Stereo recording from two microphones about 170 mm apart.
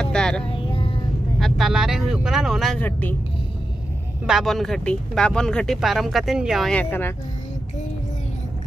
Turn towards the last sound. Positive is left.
turn(degrees=10)  # may be behind; listen again after turning